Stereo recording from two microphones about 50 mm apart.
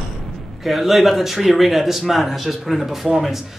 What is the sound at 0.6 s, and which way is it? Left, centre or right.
A man's voice, centre.